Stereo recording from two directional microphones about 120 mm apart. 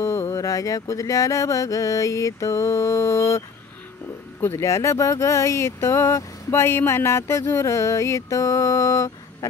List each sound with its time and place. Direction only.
0.0 s speech: 20° left (ahead or behind)